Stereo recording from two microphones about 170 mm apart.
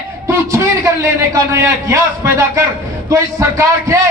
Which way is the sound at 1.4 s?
15° right (ahead or behind).